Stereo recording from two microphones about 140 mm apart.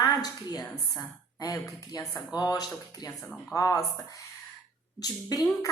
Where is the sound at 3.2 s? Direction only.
10° left (ahead or behind).